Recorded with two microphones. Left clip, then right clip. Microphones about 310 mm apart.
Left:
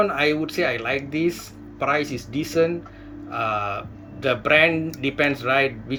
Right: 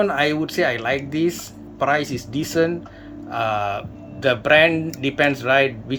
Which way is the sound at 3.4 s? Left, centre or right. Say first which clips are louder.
Right 3 dB; centre.